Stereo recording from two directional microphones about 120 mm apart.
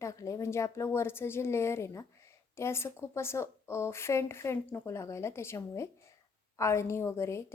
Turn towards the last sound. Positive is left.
turn(degrees=20)  # may be behind; listen again after turning